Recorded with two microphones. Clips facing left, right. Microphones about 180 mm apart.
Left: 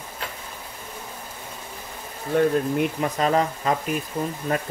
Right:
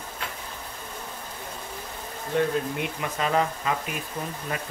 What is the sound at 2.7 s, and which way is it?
Speech, 40° left (ahead or behind).